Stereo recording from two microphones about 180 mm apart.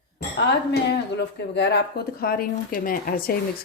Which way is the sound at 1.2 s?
70° left (ahead or behind).